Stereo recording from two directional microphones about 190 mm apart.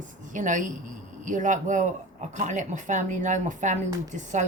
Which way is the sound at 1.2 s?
40° right (ahead or behind).